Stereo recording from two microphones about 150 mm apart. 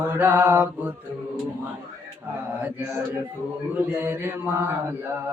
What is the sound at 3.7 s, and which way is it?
Mantra, 15° right (ahead or behind).